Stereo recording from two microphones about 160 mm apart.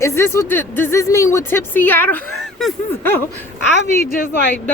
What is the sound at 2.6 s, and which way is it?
Speech, centre (ahead or behind).